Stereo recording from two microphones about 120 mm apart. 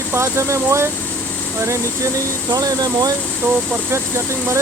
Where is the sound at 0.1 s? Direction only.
20° right (ahead or behind).